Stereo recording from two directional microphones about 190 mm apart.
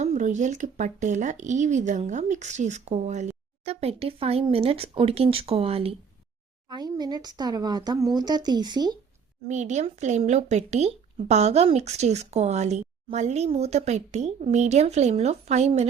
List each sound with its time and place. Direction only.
0.0 s speech: 40° right (ahead or behind); by 9.0 s 20° right (ahead or behind)
9.5 s speech: 40° right (ahead or behind)